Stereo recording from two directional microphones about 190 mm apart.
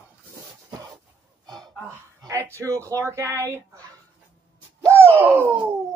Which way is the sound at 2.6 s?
15° right (ahead or behind).